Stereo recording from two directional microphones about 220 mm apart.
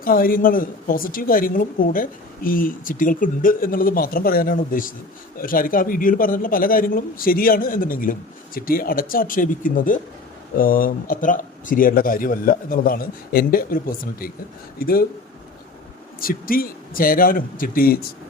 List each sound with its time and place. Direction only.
0.0 s speech: 40° left (ahead or behind)
16.2 s speech: 40° left (ahead or behind)